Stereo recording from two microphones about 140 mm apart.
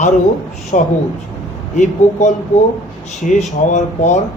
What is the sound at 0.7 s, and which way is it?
A man's voice, 55° left (ahead or behind).